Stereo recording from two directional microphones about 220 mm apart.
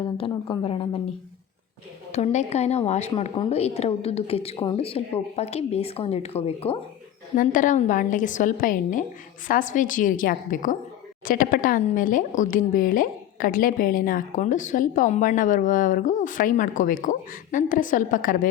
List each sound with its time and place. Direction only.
0.0 s a woman's voice: 20° left (ahead or behind)
2.1 s a woman's voice: 30° left (ahead or behind)